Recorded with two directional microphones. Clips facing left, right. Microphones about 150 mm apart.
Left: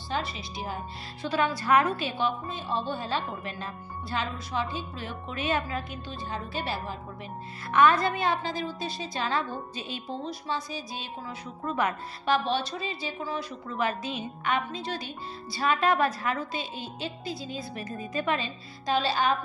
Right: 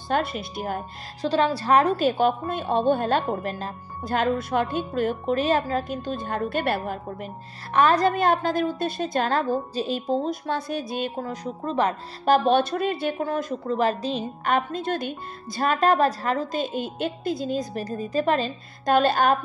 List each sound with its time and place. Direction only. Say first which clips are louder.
0.1 s a woman's voice: right 7 dB; 55° right (ahead or behind)
1.2 s a woman's voice: right 5 dB; 30° right (ahead or behind); by 7.2 s 50° right (ahead or behind)
7.7 s a woman's voice: right 3 dB; 35° right (ahead or behind)
11.6 s a woman's voice: right 4 dB; 30° right (ahead or behind)
12.3 s a woman's voice: right 8 dB; 45° right (ahead or behind)